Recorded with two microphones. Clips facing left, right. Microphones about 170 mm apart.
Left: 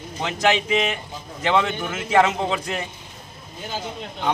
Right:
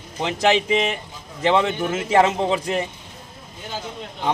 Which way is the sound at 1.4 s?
30° right (ahead or behind).